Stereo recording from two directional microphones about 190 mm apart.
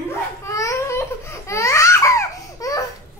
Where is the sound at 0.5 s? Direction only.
15° left (ahead or behind).